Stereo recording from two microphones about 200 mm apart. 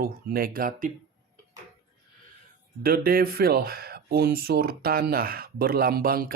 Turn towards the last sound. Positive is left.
turn(degrees=-45)  # may be behind; listen again after turning